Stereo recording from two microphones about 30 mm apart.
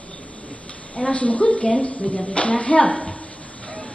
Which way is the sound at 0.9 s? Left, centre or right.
Left.